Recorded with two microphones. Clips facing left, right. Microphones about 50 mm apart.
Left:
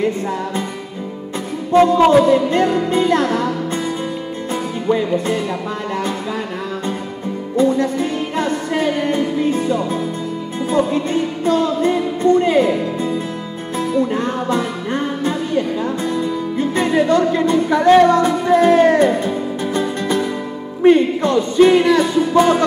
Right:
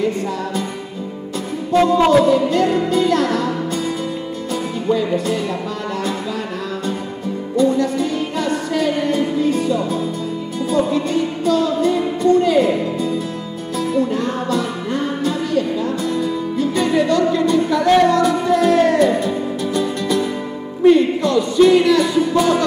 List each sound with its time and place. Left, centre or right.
1.7 s music: left
4.8 s music: left
7.5 s music: left